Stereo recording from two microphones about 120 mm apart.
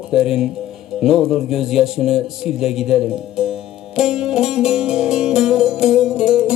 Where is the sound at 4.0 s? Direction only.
5° right (ahead or behind).